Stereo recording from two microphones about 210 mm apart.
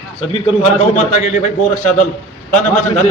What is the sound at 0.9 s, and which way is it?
Speech, 35° left (ahead or behind).